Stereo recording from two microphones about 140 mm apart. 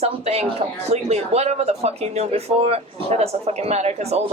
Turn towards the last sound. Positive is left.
turn(degrees=-50)  # may be behind; listen again after turning